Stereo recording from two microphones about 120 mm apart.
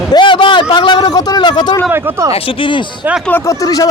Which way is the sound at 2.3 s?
45° left (ahead or behind).